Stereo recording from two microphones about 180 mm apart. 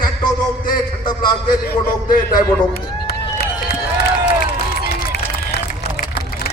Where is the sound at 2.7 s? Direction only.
60° left (ahead or behind).